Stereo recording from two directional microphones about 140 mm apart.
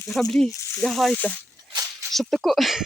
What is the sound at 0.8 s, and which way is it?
Speech, centre (ahead or behind).